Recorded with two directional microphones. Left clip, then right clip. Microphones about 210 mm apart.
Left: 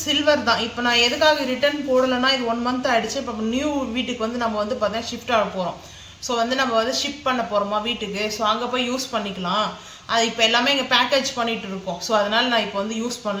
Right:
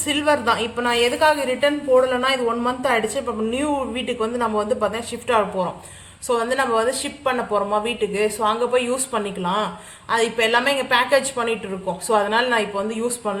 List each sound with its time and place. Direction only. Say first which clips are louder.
0.1 s a woman's voice: even; 50° right (ahead or behind)